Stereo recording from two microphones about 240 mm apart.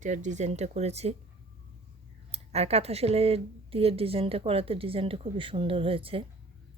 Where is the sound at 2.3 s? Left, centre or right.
Right.